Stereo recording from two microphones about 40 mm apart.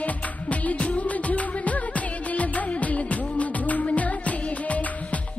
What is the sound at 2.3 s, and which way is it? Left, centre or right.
Music of bollywood, left.